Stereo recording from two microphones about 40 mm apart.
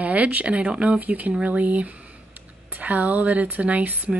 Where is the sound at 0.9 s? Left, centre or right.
Right.